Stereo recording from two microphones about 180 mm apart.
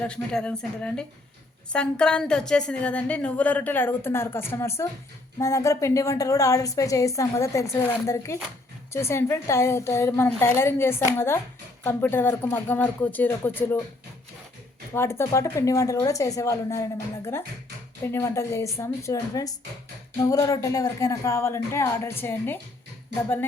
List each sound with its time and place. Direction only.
0.0 s a woman's voice: 5° left (ahead or behind)
14.9 s a woman's voice: 15° left (ahead or behind)